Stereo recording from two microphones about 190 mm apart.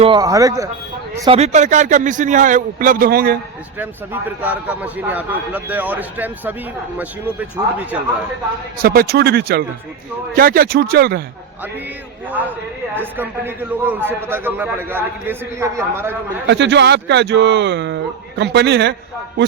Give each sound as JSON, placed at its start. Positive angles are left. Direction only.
{"t": 0.0, "sound": "a man's voice", "side_deg": -20}
{"t": 1.3, "sound": "a man's voice", "side_deg": -35}
{"t": 3.8, "sound": "a man's voice", "side_deg": -10}
{"t": 8.8, "sound": "a man's voice", "side_deg": -50}
{"t": 12.9, "sound": "a man's voice", "side_deg": -10}
{"t": 16.5, "sound": "speech", "side_deg": -65}